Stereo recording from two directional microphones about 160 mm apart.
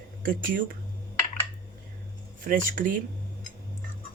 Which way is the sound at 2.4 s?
60° right (ahead or behind).